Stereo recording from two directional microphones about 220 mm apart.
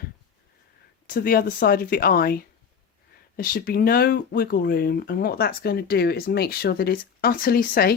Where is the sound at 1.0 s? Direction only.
40° left (ahead or behind).